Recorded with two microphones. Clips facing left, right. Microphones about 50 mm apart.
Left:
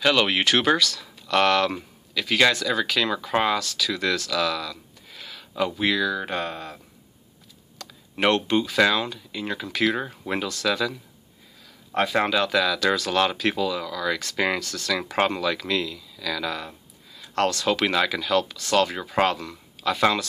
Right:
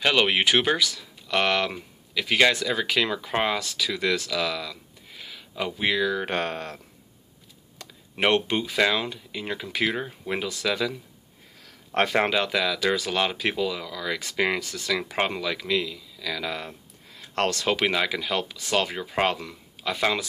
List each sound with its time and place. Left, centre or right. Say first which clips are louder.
0.0 s speech: left 1 dB; centre
6.1 s speech: right 1 dB; right
7.8 s speech: left 2 dB; right
9.9 s speech: left 2 dB; centre
10.5 s speech: left 2 dB; centre
11.9 s speech: even; right
12.2 s speech: left 5 dB; right
17.4 s speech: left 2 dB; right; by 20.0 s centre